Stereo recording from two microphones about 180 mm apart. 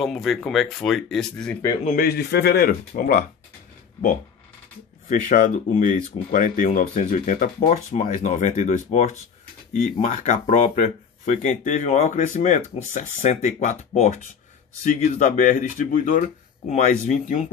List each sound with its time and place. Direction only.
0.0 s speech: centre (ahead or behind)
1.9 s speech: 55° left (ahead or behind)
5.3 s speech: 45° left (ahead or behind)